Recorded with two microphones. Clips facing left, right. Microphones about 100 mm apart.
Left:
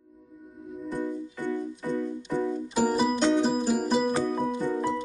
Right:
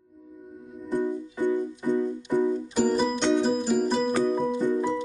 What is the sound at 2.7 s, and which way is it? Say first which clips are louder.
Music: right 1 dB; 5° left (ahead or behind).